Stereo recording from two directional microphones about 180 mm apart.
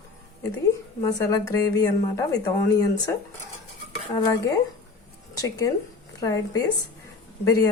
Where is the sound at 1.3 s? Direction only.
20° left (ahead or behind).